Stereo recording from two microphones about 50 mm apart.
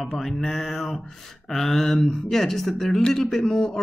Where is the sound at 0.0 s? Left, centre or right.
Centre.